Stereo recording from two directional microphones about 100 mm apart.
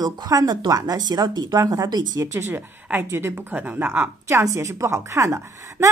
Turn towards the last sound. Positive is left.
turn(degrees=-30)  # may be behind; listen again after turning